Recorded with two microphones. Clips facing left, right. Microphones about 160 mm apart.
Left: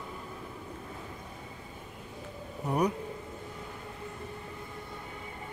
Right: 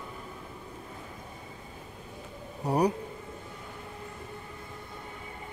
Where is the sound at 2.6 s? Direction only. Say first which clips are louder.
Right 3 dB; 35° right (ahead or behind).